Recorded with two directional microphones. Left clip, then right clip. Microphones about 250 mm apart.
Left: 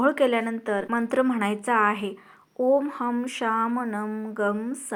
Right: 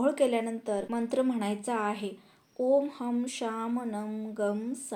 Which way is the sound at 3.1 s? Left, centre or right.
Centre.